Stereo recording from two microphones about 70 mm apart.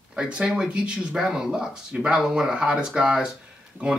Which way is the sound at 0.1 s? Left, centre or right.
Centre.